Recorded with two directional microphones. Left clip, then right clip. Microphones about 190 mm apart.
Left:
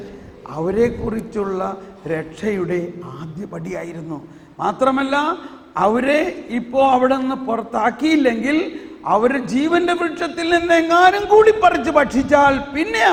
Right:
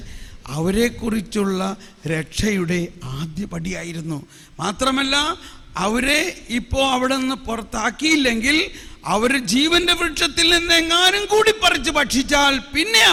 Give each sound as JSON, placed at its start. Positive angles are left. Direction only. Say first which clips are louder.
{"t": 0.5, "sound": "a man's voice", "louder": "left 3 dB", "side_deg": -25}
{"t": 0.9, "sound": "a man's voice", "louder": "left 1 dB", "side_deg": -40}
{"t": 1.5, "sound": "a man's voice", "louder": "left 1 dB", "side_deg": -25}
{"t": 4.6, "sound": "a man's voice", "louder": "left 3 dB", "side_deg": -25}
{"t": 10.8, "sound": "a man's voice", "louder": "left 4 dB", "side_deg": -5}